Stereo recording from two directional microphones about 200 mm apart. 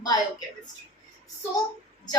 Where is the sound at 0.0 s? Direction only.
20° left (ahead or behind).